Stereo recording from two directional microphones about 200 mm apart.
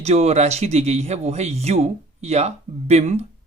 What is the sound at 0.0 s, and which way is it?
Speech, 35° right (ahead or behind).